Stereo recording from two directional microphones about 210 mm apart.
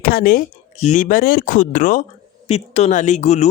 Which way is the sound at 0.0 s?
45° left (ahead or behind).